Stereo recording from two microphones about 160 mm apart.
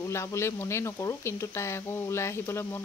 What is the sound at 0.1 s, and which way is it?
Speech, 15° left (ahead or behind).